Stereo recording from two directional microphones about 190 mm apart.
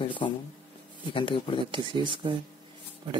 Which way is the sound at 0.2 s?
25° left (ahead or behind).